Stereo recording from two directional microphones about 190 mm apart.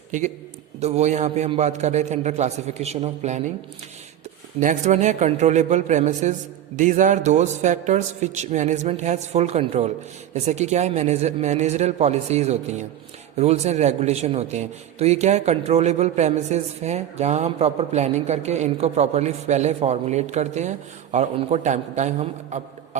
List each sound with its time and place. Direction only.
0.1 s a man's voice: 40° right (ahead or behind)
4.6 s a man's voice: 40° right (ahead or behind)